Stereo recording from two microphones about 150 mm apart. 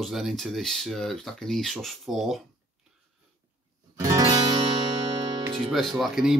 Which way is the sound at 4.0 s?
25° right (ahead or behind).